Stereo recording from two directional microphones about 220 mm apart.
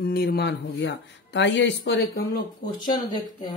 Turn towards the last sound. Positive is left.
turn(degrees=20)  # may be behind; listen again after turning